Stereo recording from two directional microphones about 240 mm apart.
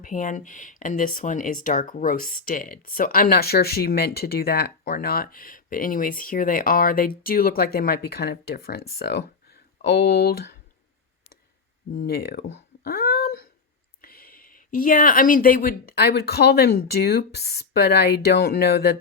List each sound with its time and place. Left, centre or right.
0.0 s speech: left
11.9 s a sound: left
14.0 s speech: left